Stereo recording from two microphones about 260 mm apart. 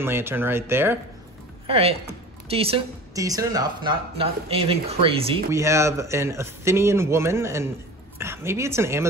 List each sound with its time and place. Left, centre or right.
0.0 s speech: centre
1.7 s speech: right